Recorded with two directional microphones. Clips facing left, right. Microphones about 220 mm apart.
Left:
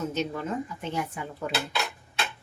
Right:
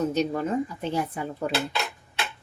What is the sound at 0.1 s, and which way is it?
A woman's voice, 40° right (ahead or behind).